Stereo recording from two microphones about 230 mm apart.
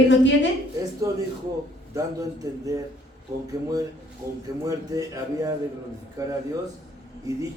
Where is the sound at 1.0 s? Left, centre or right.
Centre.